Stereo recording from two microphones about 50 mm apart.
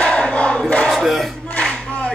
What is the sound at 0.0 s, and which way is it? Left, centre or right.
Crowd, centre.